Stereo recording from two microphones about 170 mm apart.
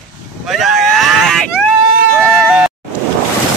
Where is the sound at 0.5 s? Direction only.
Centre (ahead or behind).